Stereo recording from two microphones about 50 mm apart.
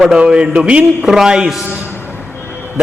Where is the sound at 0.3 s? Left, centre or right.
Centre.